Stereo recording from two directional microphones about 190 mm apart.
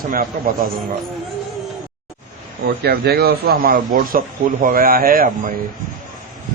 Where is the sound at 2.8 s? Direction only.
55° right (ahead or behind).